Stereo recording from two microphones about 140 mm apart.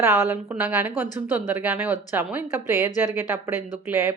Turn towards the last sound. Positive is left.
turn(degrees=-15)  # may be behind; listen again after turning